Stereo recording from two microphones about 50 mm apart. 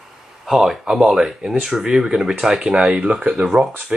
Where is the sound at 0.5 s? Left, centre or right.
Centre.